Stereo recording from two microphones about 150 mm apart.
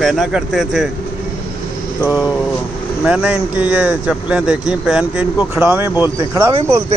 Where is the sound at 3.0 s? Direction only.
5° right (ahead or behind).